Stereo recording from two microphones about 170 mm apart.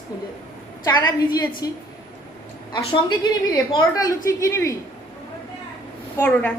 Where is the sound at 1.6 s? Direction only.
20° left (ahead or behind).